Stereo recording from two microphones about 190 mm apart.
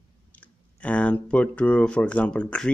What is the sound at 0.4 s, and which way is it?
Speech, 10° left (ahead or behind).